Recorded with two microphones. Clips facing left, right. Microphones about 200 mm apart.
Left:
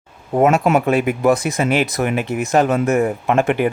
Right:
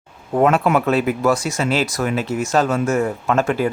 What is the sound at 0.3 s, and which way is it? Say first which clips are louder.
Speech: left 1 dB; 10° left (ahead or behind).